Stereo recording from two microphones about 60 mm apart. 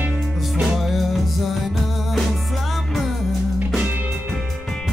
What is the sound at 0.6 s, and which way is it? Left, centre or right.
Music, centre.